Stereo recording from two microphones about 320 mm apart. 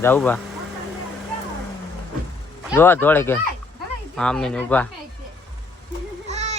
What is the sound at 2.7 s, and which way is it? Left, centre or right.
Speech, centre.